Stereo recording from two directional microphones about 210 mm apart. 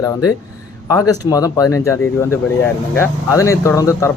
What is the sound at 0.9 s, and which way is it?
Speech, 15° left (ahead or behind).